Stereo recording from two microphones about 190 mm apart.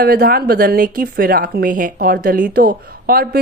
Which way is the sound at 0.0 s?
50° right (ahead or behind).